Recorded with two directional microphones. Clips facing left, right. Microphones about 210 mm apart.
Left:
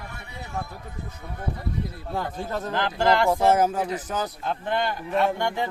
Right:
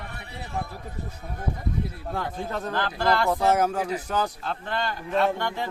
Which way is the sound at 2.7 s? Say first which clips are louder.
Left 3 dB; 15° left (ahead or behind).